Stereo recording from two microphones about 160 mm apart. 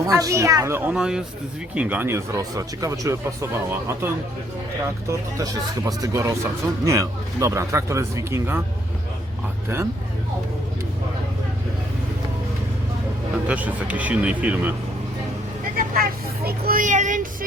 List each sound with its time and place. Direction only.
0.1 s speech: 20° right (ahead or behind)
0.9 s speech: 5° right (ahead or behind)
13.5 s speech: 10° right (ahead or behind)
15.7 s speech: 70° right (ahead or behind); by 17.2 s 50° right (ahead or behind)